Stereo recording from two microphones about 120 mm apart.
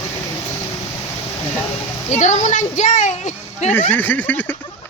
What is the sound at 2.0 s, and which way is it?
Speech, 75° left (ahead or behind).